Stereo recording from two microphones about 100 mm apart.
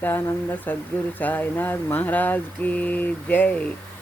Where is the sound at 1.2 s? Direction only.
20° left (ahead or behind).